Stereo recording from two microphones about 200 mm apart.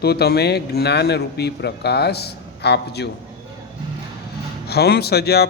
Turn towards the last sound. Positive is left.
turn(degrees=55)  # may be behind; listen again after turning